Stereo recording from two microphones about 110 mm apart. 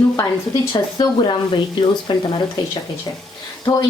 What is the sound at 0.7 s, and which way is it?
Speech, 40° left (ahead or behind).